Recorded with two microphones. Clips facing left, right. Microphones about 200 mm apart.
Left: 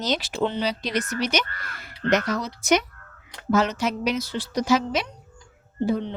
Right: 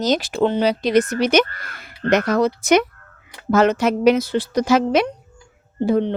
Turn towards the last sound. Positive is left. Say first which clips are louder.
# right 6 dB
turn(degrees=-60)  # may be behind; listen again after turning